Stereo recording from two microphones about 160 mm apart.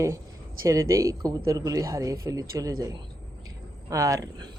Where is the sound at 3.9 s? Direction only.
20° right (ahead or behind).